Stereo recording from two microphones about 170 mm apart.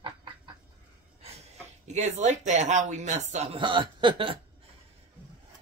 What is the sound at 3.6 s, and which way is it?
Speech, 30° right (ahead or behind).